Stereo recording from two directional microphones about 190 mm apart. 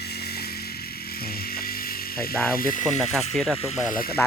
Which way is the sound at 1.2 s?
55° left (ahead or behind).